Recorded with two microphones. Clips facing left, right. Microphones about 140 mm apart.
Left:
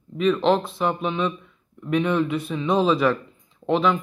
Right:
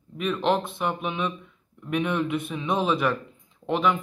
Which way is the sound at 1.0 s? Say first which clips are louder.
Left 4 dB; 10° right (ahead or behind).